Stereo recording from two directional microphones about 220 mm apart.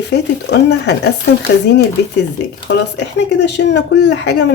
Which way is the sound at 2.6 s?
50° left (ahead or behind).